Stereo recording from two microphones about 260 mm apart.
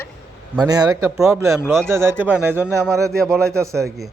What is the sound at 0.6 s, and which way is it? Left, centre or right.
Speech, centre.